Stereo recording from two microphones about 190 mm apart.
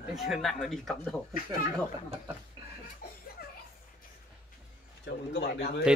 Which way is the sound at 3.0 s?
55° left (ahead or behind).